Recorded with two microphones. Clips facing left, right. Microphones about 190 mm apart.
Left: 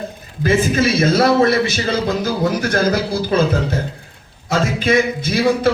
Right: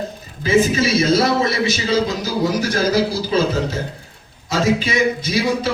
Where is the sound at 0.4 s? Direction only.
55° left (ahead or behind).